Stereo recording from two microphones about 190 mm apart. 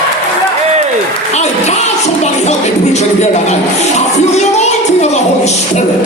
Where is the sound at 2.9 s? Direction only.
35° left (ahead or behind).